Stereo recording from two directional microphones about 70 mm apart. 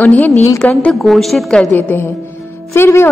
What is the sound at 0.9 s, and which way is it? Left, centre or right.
Speech, centre.